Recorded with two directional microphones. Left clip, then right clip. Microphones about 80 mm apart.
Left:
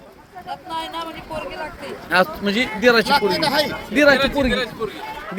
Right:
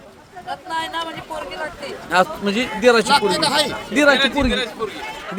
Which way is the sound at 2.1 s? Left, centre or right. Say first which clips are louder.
Even; right.